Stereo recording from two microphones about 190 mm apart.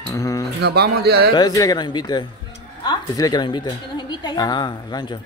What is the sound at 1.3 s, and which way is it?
A woman's voice, 20° left (ahead or behind).